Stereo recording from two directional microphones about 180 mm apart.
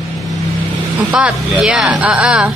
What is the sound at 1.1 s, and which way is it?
Mantra, 5° right (ahead or behind).